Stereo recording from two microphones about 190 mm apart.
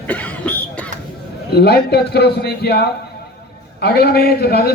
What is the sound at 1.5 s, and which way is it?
A man's voice, 55° left (ahead or behind).